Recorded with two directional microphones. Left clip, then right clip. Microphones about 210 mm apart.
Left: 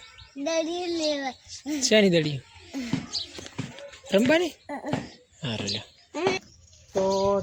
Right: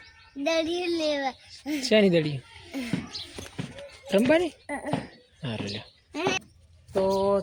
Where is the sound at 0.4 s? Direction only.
5° right (ahead or behind).